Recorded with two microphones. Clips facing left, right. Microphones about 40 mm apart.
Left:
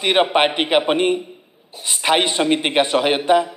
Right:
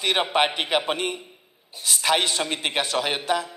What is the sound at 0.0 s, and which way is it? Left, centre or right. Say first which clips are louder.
A man's voice: left 6 dB; left.